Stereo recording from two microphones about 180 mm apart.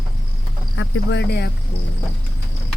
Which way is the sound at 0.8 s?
70° left (ahead or behind).